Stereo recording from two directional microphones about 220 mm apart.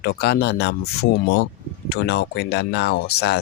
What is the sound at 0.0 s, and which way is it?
Speech, 45° left (ahead or behind).